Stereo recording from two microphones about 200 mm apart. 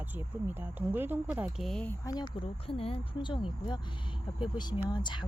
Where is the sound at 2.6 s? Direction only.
30° left (ahead or behind).